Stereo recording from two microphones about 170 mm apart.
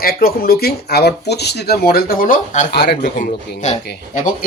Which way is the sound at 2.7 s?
70° left (ahead or behind).